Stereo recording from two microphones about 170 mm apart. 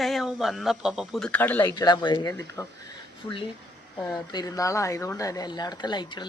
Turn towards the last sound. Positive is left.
turn(degrees=25)  # may be behind; listen again after turning